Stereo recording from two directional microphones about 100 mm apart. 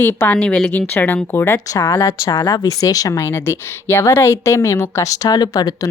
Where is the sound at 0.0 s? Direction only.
20° left (ahead or behind); by 5.9 s 40° left (ahead or behind).